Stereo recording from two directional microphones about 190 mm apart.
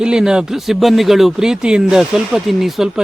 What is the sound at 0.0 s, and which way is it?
Speech, 5° right (ahead or behind).